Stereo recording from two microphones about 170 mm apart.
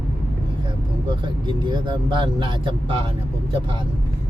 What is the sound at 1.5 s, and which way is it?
Speech, 25° right (ahead or behind).